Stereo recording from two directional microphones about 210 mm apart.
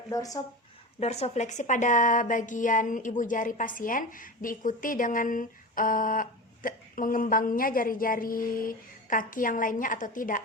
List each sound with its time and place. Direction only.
0.1 s speech: 15° left (ahead or behind)
0.9 s a woman's voice: 30° left (ahead or behind)